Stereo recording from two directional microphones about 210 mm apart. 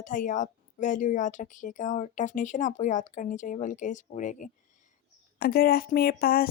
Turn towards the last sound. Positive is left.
turn(degrees=45)  # may be behind; listen again after turning